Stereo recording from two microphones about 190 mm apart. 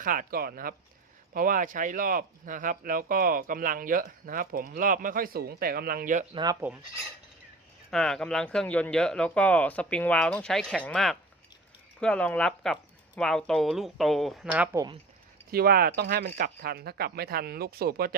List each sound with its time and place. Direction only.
0.0 s speech: 45° right (ahead or behind)
6.3 s speech: 20° right (ahead or behind)
7.9 s speech: centre (ahead or behind)
15.5 s speech: 50° right (ahead or behind)